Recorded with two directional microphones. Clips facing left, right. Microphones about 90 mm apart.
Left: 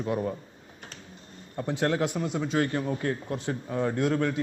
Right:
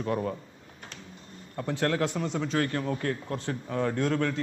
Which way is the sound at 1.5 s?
15° left (ahead or behind).